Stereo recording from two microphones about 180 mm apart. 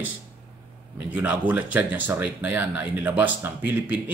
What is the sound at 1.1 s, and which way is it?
Speech, 10° right (ahead or behind).